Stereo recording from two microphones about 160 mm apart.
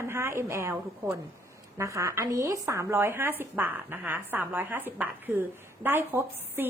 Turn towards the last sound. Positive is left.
turn(degrees=-15)  # may be behind; listen again after turning